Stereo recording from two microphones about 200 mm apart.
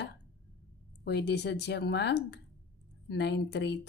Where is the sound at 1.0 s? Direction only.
55° left (ahead or behind).